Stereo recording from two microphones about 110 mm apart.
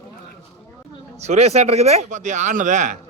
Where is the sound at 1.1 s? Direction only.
90° right.